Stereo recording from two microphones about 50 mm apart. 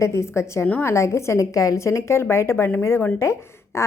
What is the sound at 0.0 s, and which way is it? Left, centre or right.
A woman's voice, left.